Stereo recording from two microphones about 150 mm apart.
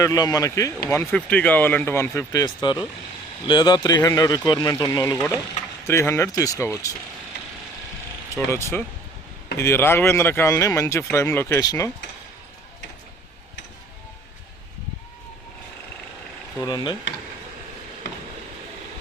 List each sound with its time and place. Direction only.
0.0 s speech: 20° left (ahead or behind)
0.9 s speech: 10° left (ahead or behind)
8.4 s speech: 20° left (ahead or behind)
16.6 s speech: 25° left (ahead or behind)